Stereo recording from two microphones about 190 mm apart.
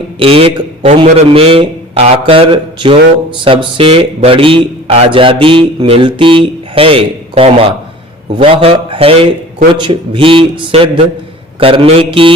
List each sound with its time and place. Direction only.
0.2 s speech: 30° right (ahead or behind)